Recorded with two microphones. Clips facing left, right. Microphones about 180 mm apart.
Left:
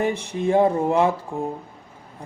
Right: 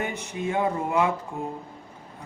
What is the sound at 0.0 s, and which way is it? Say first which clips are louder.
Speech: left 7 dB; 30° left (ahead or behind).